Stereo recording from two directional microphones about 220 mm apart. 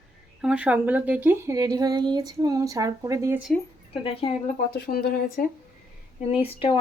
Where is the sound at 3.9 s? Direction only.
25° left (ahead or behind).